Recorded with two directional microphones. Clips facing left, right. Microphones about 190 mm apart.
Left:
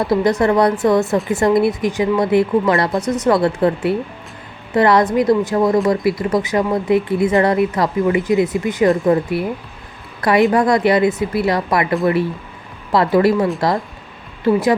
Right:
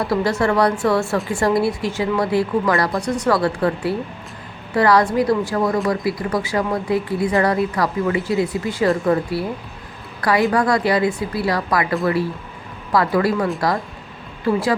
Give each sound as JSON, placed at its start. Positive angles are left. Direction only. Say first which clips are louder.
{"t": 0.0, "sound": "a woman's voice", "louder": "left 4 dB", "side_deg": 20}
{"t": 13.1, "sound": "speech", "louder": "left 4 dB", "side_deg": 25}